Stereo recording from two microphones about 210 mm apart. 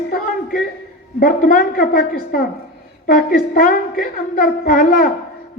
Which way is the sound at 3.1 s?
45° left (ahead or behind).